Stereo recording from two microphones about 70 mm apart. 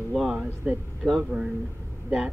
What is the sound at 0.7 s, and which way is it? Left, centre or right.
Speech, centre.